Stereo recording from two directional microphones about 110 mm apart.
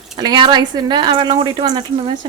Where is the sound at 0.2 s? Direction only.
40° right (ahead or behind).